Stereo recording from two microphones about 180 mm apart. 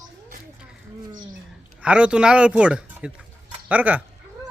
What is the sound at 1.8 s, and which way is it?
Speech, 5° right (ahead or behind).